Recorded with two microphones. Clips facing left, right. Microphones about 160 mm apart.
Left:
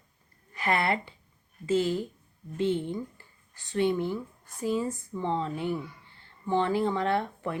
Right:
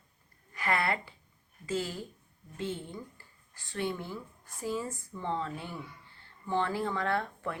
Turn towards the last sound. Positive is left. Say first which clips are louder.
# left 4 dB
turn(degrees=20)  # may be behind; listen again after turning